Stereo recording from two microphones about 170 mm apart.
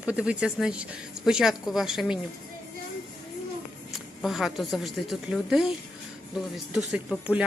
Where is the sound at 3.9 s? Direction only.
Centre (ahead or behind).